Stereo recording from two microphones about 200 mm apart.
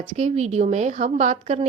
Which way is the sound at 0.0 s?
35° right (ahead or behind).